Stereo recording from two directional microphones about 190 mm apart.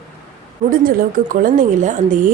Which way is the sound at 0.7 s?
45° right (ahead or behind).